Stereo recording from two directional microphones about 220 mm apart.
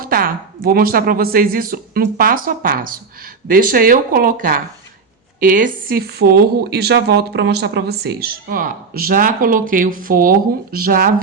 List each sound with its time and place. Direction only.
0.0 s a woman's voice: 40° right (ahead or behind)